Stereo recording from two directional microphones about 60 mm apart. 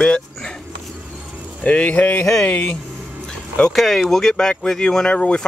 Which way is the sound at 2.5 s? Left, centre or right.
Left.